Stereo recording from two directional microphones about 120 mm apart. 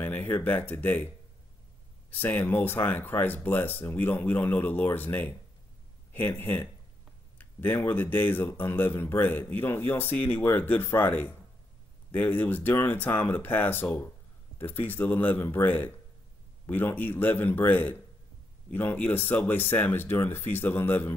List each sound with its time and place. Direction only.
0.0 s speech: 15° left (ahead or behind)